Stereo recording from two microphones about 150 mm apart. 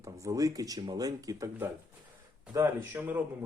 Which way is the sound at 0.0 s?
20° right (ahead or behind).